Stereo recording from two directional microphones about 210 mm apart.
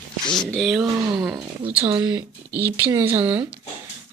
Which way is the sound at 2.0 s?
5° right (ahead or behind).